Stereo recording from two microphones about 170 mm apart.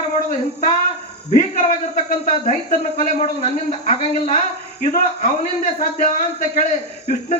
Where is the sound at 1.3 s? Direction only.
50° left (ahead or behind).